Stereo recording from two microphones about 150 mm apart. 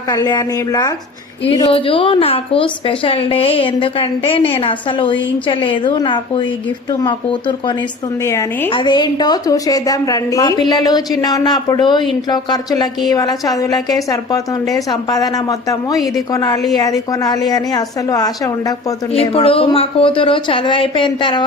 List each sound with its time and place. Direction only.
0.1 s a woman's voice: 25° left (ahead or behind)
1.5 s a woman's voice: 35° left (ahead or behind)
8.2 s a woman's voice: 20° left (ahead or behind)
8.7 s a woman's voice: 30° left (ahead or behind)
19.1 s a woman's voice: 40° left (ahead or behind)